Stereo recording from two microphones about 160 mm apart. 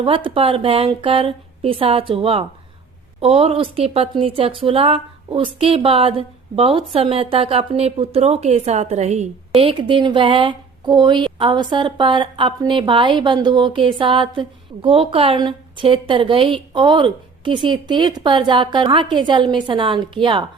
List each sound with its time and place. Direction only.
0.0 s speech: 30° right (ahead or behind)
9.6 s speech: 35° right (ahead or behind)